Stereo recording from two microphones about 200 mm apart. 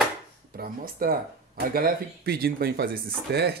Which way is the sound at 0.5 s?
45° right (ahead or behind).